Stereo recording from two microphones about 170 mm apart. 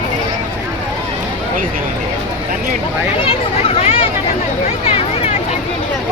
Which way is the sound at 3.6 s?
35° left (ahead or behind).